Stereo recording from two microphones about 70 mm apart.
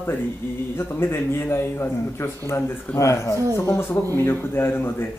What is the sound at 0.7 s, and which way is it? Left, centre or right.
Speech, left.